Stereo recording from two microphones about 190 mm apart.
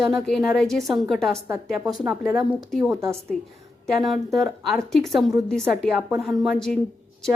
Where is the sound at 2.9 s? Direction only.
15° right (ahead or behind).